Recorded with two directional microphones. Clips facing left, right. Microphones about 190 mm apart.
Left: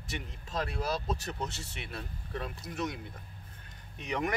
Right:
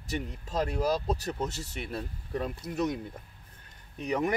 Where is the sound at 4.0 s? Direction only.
35° right (ahead or behind).